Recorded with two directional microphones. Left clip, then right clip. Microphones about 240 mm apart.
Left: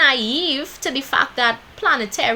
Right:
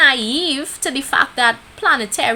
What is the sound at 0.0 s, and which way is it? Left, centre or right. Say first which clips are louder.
A woman's voice: right 2 dB; right.